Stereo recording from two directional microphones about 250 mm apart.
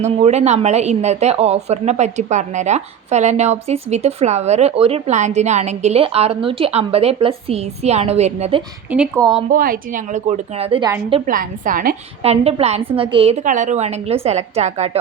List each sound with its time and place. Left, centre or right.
0.0 s a woman's voice: right
8.9 s speech: centre
9.5 s a woman's voice: right
11.3 s a woman's voice: right